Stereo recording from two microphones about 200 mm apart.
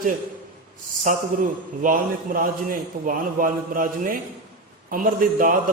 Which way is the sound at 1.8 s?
45° right (ahead or behind).